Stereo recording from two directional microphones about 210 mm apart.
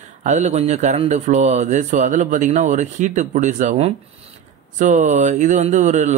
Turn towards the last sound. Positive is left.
turn(degrees=-35)  # may be behind; listen again after turning